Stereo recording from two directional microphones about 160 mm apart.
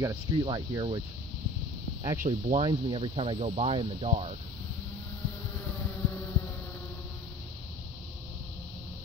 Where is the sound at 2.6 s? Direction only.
30° right (ahead or behind).